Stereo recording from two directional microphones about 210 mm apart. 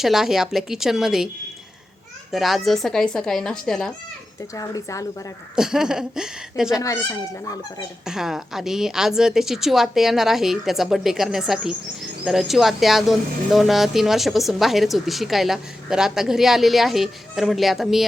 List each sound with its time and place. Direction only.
0.0 s speech: centre (ahead or behind)
2.3 s speech: centre (ahead or behind)
4.5 s speech: 15° left (ahead or behind)
5.5 s speech: 5° right (ahead or behind)
6.8 s speech: 15° left (ahead or behind)
8.0 s speech: centre (ahead or behind)